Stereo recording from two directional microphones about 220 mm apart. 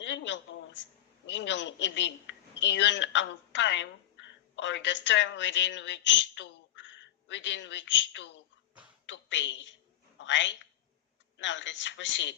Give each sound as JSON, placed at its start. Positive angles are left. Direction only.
{"t": 0.0, "sound": "a woman's voice", "side_deg": 55}